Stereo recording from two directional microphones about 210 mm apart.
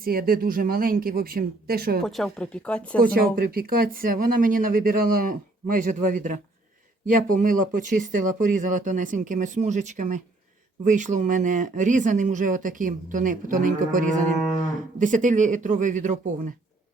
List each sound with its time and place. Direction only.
0.0 s speech: 45° right (ahead or behind)
2.0 s speech: centre (ahead or behind)
3.0 s speech: 45° right (ahead or behind)